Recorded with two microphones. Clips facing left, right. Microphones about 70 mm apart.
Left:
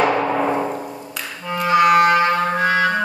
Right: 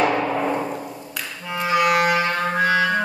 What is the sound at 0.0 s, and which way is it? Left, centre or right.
Timpani, left.